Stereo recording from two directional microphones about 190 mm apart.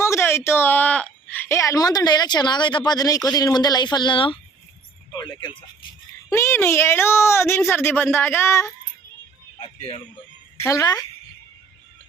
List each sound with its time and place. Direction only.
0.0 s a woman's voice: 15° left (ahead or behind)
6.3 s speech: 15° left (ahead or behind)
10.6 s speech: 15° left (ahead or behind)